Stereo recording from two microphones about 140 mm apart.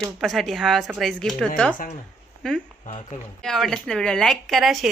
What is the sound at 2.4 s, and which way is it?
A woman's voice, 5° left (ahead or behind).